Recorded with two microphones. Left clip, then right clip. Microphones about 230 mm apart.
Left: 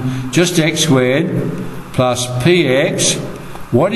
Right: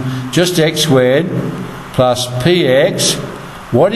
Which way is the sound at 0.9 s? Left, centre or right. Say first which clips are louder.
Right 3 dB; centre.